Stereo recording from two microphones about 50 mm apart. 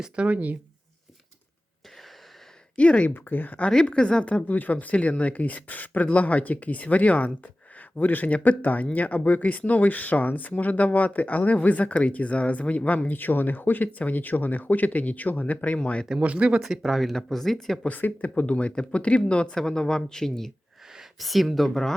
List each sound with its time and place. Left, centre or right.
0.0 s speech: right
2.7 s speech: left
3.1 s speech: left
3.8 s speech: centre
16.2 s speech: right
16.8 s speech: centre
17.8 s speech: left; by 21.9 s centre